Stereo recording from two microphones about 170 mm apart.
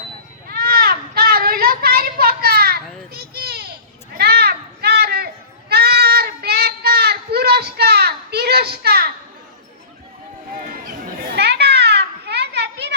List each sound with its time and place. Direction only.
0.4 s a sound: 65° right (ahead or behind)
3.1 s children playing: 65° right (ahead or behind)
4.2 s goat: 70° right (ahead or behind)
10.7 s children playing: 55° right (ahead or behind); by 12.9 s 80° right